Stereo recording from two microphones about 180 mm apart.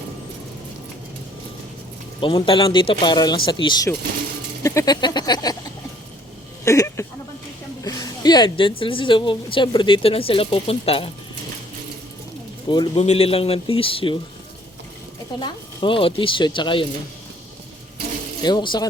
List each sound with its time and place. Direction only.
2.2 s a woman's voice: 30° left (ahead or behind)
6.7 s speech: 15° left (ahead or behind)
7.9 s a sound: 20° left (ahead or behind)
8.8 s a woman's voice: 30° left (ahead or behind)
12.6 s a man's voice: 25° left (ahead or behind)
13.0 s speech: 35° left (ahead or behind)
15.4 s a woman's voice: 25° left (ahead or behind)
18.4 s a woman's voice: 25° left (ahead or behind)